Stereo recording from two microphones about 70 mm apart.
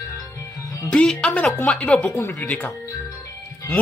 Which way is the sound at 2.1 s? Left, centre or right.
Left.